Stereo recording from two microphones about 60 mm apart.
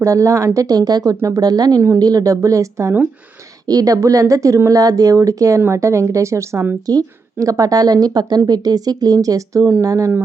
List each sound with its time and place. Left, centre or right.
0.0 s a woman's voice: right
3.7 s a woman's voice: right
4.7 s a woman's voice: right
5.7 s speech: right
6.8 s a woman's voice: right
9.8 s speech: right